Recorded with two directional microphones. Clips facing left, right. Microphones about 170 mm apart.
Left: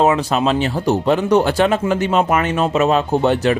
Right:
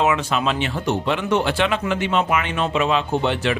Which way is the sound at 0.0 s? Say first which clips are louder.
Left 5 dB; 35° left (ahead or behind).